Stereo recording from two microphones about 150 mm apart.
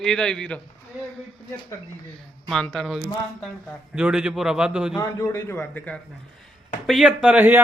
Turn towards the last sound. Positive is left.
turn(degrees=-10)  # may be behind; listen again after turning